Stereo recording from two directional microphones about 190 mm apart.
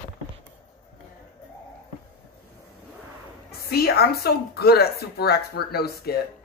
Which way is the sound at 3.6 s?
55° left (ahead or behind).